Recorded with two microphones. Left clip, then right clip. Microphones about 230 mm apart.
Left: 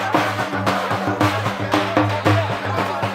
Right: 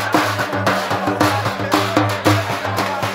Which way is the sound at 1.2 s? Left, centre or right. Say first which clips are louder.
Right 3 dB; right.